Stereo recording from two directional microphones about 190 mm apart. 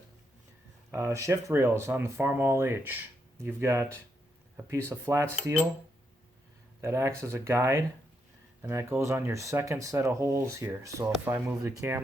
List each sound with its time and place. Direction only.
0.9 s speech: 15° right (ahead or behind)
6.8 s speech: 15° right (ahead or behind)